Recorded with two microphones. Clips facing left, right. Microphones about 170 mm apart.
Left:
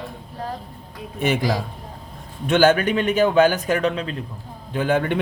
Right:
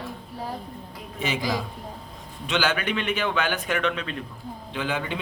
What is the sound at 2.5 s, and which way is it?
A man's voice, 50° left (ahead or behind).